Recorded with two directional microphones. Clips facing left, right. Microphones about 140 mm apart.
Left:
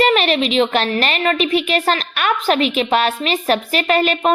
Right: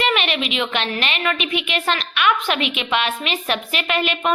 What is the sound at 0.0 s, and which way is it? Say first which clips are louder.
A woman's voice: left 6 dB; 40° left (ahead or behind).